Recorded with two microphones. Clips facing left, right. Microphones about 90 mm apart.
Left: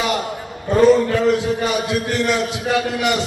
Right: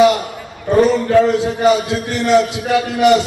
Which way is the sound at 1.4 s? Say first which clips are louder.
Right 6 dB; 20° right (ahead or behind).